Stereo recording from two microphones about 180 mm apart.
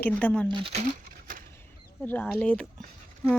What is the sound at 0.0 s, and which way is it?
Speech, 10° left (ahead or behind).